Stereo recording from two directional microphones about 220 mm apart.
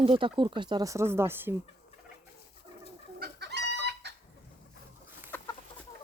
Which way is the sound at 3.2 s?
50° right (ahead or behind).